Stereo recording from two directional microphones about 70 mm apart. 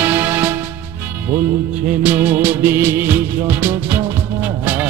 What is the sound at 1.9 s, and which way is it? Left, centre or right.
Music of bollywood, right.